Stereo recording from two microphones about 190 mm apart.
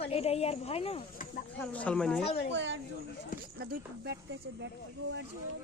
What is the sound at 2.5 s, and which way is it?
Speech, 70° right (ahead or behind).